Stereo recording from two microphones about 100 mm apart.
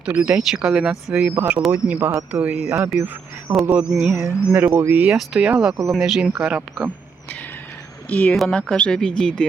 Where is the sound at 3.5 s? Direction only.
35° right (ahead or behind).